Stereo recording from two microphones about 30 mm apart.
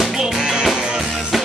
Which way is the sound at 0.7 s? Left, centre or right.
Right.